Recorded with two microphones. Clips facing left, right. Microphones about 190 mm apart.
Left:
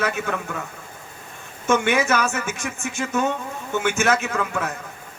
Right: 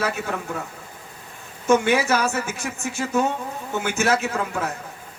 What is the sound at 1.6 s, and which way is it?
Speech, 35° right (ahead or behind).